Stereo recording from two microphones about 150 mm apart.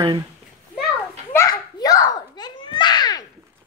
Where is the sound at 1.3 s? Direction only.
25° left (ahead or behind).